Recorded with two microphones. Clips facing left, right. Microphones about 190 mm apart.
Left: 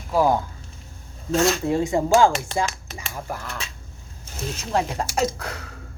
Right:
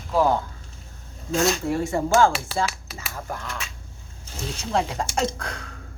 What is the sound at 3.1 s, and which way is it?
Speech, 10° left (ahead or behind).